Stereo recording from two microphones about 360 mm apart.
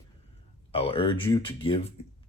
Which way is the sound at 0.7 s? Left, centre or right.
Centre.